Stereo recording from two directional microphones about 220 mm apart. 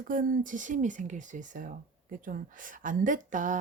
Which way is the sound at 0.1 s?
40° right (ahead or behind).